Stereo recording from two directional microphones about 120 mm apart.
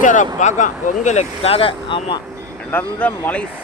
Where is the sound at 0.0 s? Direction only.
90° left; by 2.2 s 45° left (ahead or behind).